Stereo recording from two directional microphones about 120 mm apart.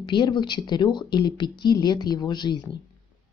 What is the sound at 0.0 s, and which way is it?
Speech, 40° left (ahead or behind).